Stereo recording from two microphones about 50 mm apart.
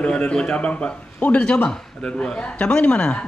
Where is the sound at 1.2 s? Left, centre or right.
Left.